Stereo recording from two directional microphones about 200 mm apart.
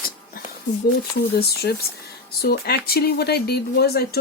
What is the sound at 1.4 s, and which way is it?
Speech, 55° left (ahead or behind).